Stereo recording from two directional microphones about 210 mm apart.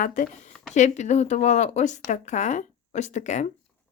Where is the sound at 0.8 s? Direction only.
35° left (ahead or behind).